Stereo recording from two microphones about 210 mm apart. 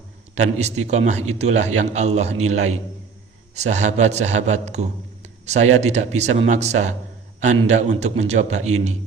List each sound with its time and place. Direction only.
0.3 s a man's voice: 30° right (ahead or behind)